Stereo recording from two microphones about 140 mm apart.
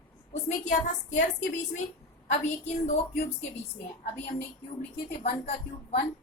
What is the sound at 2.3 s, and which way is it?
Speech, 55° left (ahead or behind).